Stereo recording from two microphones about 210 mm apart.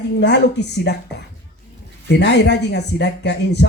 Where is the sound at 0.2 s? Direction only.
55° left (ahead or behind).